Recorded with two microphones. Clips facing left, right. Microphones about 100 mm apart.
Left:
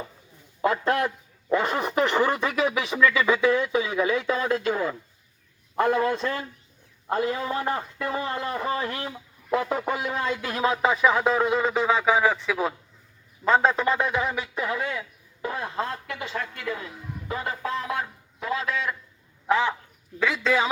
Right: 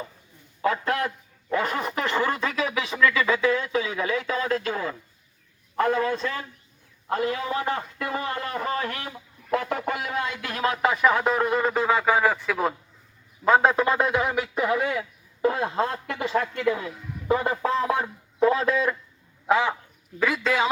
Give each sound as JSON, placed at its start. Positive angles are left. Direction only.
{"t": 0.6, "sound": "a man's voice", "side_deg": 20}
{"t": 6.1, "sound": "a man's voice", "side_deg": 30}
{"t": 9.5, "sound": "a sound", "side_deg": 15}
{"t": 10.2, "sound": "a man's voice", "side_deg": 25}
{"t": 10.8, "sound": "a man's voice", "side_deg": 0}
{"t": 13.4, "sound": "speech", "side_deg": -10}
{"t": 18.3, "sound": "speech", "side_deg": -40}
{"t": 19.5, "sound": "speech", "side_deg": -15}
{"t": 20.1, "sound": "a man's voice", "side_deg": -5}